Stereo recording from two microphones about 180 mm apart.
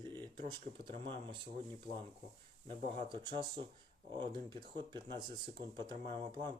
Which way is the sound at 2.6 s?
25° right (ahead or behind).